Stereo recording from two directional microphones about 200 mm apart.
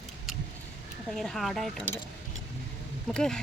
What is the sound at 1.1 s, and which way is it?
Speech, centre (ahead or behind).